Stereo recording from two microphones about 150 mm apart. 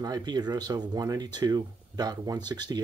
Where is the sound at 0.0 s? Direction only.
25° right (ahead or behind).